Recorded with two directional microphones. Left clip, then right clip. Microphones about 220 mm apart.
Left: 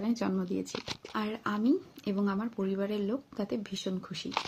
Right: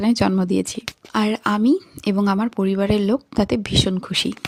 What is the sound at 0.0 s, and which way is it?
Speech, 40° right (ahead or behind).